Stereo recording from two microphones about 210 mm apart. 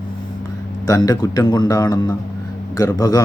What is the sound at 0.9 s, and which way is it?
Speech, 15° left (ahead or behind).